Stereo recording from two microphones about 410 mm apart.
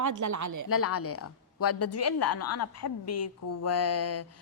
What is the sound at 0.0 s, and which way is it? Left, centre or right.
Speech, right.